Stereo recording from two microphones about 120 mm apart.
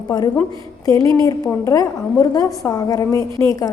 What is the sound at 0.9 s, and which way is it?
A woman's voice, 30° left (ahead or behind).